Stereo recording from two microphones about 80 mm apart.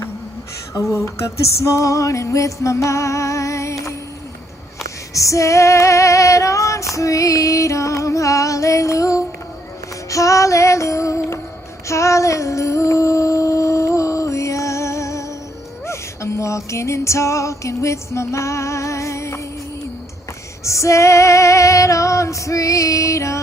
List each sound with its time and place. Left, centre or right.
0.9 s female singing: left
1.7 s music: left
5.1 s female singing: left
6.9 s music: left
20.7 s female singing: left